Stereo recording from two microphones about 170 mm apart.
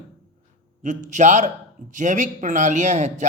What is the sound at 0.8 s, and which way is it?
Speech, 45° right (ahead or behind).